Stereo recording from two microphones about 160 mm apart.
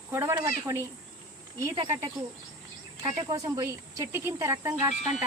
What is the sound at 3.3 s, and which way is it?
Speech, 20° right (ahead or behind).